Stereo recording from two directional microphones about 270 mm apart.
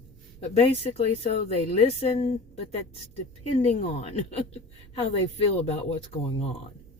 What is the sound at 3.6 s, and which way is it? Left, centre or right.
Speech, left.